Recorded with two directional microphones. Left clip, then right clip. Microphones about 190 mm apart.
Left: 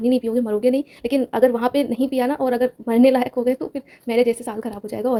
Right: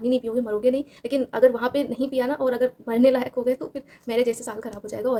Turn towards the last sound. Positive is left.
turn(degrees=30)  # may be behind; listen again after turning